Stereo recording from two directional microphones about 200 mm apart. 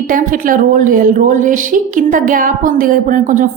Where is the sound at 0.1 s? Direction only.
45° right (ahead or behind).